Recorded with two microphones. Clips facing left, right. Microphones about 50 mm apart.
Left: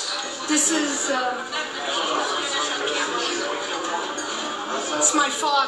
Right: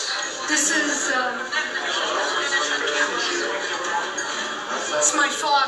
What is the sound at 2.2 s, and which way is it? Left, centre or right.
Music, right.